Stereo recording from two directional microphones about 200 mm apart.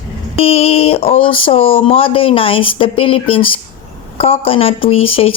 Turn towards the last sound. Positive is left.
turn(degrees=30)  # may be behind; listen again after turning